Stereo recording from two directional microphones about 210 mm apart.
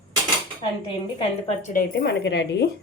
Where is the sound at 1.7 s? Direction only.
55° left (ahead or behind).